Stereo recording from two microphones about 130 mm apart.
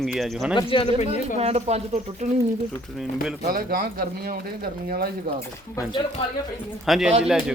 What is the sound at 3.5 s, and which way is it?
Speech, 90° right.